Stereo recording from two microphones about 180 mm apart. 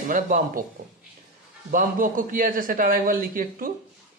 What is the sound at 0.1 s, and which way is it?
Speech, 50° right (ahead or behind).